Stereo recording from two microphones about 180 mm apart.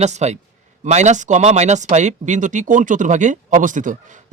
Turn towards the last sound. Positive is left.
turn(degrees=-45)  # may be behind; listen again after turning